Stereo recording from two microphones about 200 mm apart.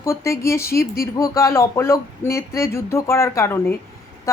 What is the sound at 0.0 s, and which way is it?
A woman's voice, 15° left (ahead or behind).